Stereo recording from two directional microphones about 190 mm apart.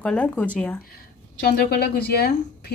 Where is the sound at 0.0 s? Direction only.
5° left (ahead or behind).